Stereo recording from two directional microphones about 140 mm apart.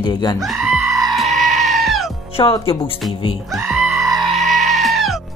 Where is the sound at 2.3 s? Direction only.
40° left (ahead or behind).